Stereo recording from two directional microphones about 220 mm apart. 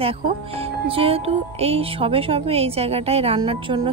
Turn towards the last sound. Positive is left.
turn(degrees=-25)  # may be behind; listen again after turning